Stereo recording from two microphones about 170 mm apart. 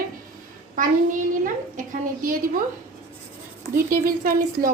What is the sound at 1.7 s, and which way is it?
Speech, 50° right (ahead or behind).